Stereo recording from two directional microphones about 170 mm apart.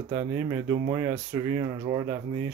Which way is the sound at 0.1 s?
20° right (ahead or behind).